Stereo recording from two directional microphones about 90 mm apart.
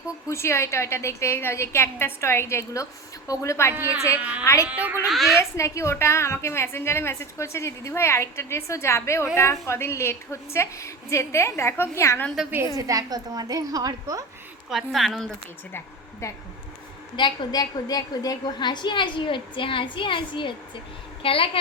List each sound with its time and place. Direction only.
0.3 s a woman's voice: 30° left (ahead or behind)
4.2 s speech: 15° right (ahead or behind)
5.0 s a woman's voice: centre (ahead or behind)
5.4 s a woman's voice: 35° left (ahead or behind)
12.7 s a woman's voice: 40° right (ahead or behind)
14.7 s a woman's voice: centre (ahead or behind)
16.2 s a woman's voice: 35° left (ahead or behind)
17.2 s a woman's voice: 55° left (ahead or behind)
21.2 s a woman's voice: 85° left